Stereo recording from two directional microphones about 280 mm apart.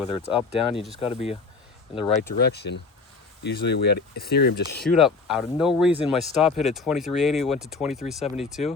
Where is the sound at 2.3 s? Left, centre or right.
Left.